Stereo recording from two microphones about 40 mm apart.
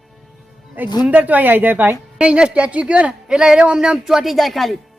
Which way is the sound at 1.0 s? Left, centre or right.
Right.